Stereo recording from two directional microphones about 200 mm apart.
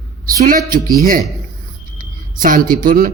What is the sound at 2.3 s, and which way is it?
Speech, 45° right (ahead or behind).